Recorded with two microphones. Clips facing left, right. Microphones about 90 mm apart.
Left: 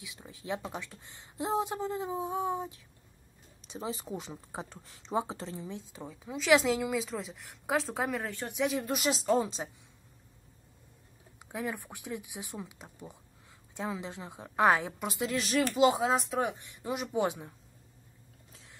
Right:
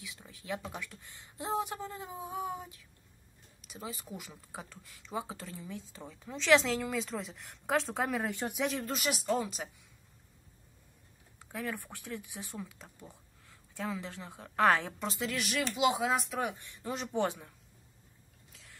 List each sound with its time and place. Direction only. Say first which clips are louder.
0.0 s speech: left 4 dB; 20° left (ahead or behind); by 8.3 s centre (ahead or behind)
8.3 s speech: right 2 dB; 15° right (ahead or behind)
8.5 s speech: left 6 dB; 5° left (ahead or behind)
8.8 s speech: left 4 dB; 20° left (ahead or behind)
11.3 s speech: left 2 dB; 15° left (ahead or behind)
15.6 s speech: left 4 dB; 40° left (ahead or behind)
16.1 s speech: left 3 dB; 25° left (ahead or behind)